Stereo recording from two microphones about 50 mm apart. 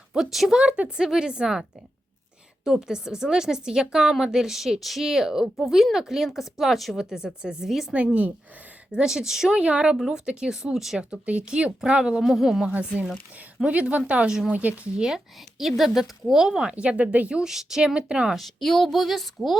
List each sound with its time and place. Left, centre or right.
0.1 s a woman's voice: centre
0.5 s a woman's voice: right
2.6 s a woman's voice: centre
5.5 s a woman's voice: centre
7.9 s speech: right
8.9 s a woman's voice: centre
9.6 s a woman's voice: right
11.1 s speech: right
12.2 s a woman's voice: centre; by 14.8 s right
14.9 s a woman's voice: centre
16.7 s speech: right
17.5 s a woman's voice: centre
18.3 s a woman's voice: centre